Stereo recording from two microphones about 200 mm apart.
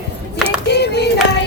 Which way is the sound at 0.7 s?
55° left (ahead or behind).